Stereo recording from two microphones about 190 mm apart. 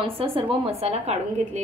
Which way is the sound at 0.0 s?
30° right (ahead or behind).